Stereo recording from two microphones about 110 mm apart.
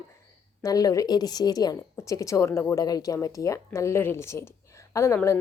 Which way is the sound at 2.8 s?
35° left (ahead or behind).